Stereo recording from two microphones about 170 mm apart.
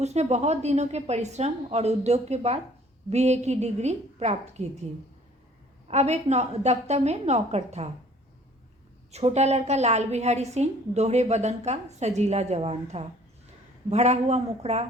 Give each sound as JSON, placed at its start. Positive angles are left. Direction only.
{"t": 0.0, "sound": "a woman's voice", "side_deg": -40}
{"t": 5.9, "sound": "a woman's voice", "side_deg": -40}
{"t": 9.1, "sound": "a woman's voice", "side_deg": -40}